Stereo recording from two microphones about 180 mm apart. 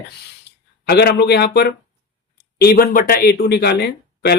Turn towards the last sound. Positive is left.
turn(degrees=65)  # may be behind; listen again after turning